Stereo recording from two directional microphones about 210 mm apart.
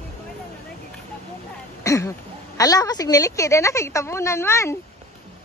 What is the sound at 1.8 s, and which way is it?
A woman's voice, 15° left (ahead or behind).